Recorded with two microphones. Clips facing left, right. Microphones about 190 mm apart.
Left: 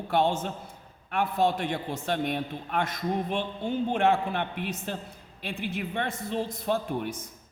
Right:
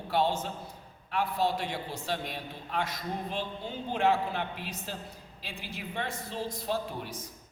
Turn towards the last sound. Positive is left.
turn(degrees=55)  # may be behind; listen again after turning